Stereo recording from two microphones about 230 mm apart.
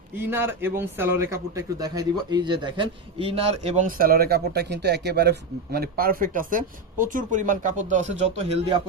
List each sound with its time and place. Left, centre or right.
0.3 s a man's voice: centre; by 8.8 s right